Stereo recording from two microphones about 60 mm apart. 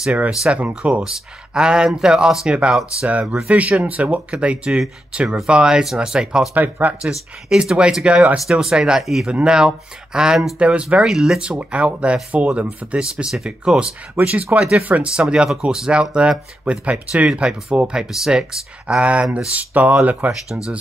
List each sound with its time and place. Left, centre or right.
0.5 s speech: right
1.5 s speech: centre
6.5 s speech: right
7.0 s speech: centre
8.5 s speech: centre
10.6 s speech: right
11.1 s speech: centre
11.7 s speech: centre
20.4 s speech: centre